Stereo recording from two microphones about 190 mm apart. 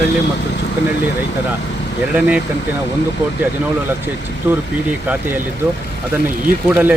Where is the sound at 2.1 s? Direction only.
10° right (ahead or behind).